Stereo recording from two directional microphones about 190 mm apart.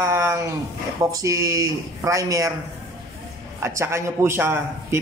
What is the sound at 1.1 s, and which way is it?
A man's voice, 15° right (ahead or behind).